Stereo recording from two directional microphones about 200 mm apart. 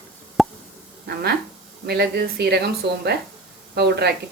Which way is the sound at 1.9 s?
50° right (ahead or behind).